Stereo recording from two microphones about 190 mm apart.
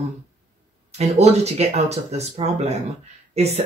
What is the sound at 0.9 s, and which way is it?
Speech, 35° right (ahead or behind).